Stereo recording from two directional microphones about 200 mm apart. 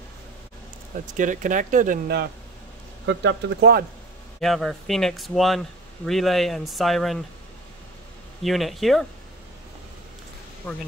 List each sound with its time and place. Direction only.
1.1 s speech: 40° right (ahead or behind)
3.1 s speech: 60° right (ahead or behind)
4.4 s speech: centre (ahead or behind)
8.4 s speech: centre (ahead or behind)
10.6 s speech: 10° left (ahead or behind)